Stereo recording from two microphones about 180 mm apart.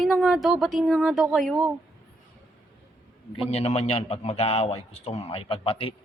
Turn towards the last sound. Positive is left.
turn(degrees=30)  # may be behind; listen again after turning